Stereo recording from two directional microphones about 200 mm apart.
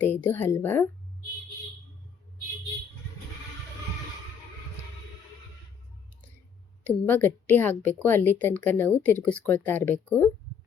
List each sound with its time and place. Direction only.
0.0 s speech: 10° left (ahead or behind)
6.8 s speech: 10° left (ahead or behind)